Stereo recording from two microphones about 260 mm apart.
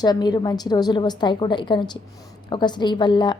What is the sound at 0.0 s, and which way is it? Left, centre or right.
A woman's voice, centre.